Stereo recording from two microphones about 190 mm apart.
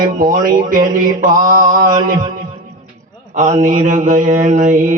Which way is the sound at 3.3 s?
40° right (ahead or behind).